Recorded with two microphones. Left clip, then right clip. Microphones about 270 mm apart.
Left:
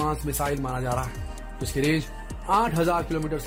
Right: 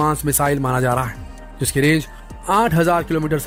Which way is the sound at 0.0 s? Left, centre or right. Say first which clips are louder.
Right 9 dB; right.